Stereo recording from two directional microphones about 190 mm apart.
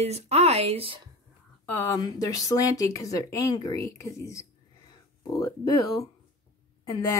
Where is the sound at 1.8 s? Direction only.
15° left (ahead or behind).